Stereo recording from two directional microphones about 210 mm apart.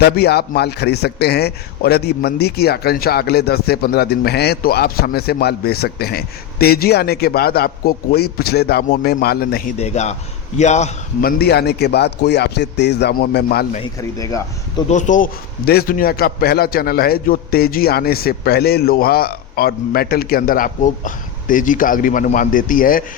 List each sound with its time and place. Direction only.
0.0 s a man's voice: 50° left (ahead or behind)
9.7 s a man's voice: 30° left (ahead or behind); by 13.7 s 50° left (ahead or behind)
14.0 s speech: 15° left (ahead or behind)
14.8 s a man's voice: 35° left (ahead or behind)